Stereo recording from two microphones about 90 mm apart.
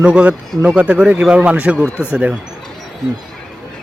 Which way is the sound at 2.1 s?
15° right (ahead or behind).